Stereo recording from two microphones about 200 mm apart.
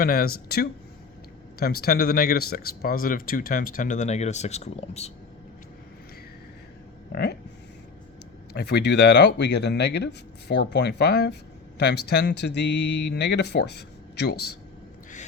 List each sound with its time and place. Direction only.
0.0 s speech: 50° left (ahead or behind); by 5.1 s 30° left (ahead or behind)
7.1 s speech: 55° left (ahead or behind)
8.5 s speech: 55° left (ahead or behind)